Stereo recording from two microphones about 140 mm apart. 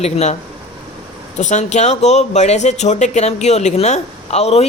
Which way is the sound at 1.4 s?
55° left (ahead or behind).